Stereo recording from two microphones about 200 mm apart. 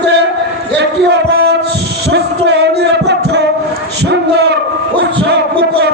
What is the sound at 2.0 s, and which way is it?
Music, 55° right (ahead or behind).